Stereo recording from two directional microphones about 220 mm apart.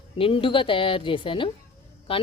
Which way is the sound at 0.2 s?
25° left (ahead or behind).